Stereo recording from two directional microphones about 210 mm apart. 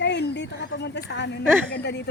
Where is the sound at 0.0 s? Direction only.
55° left (ahead or behind).